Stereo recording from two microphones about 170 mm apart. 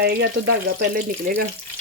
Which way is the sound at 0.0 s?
80° right.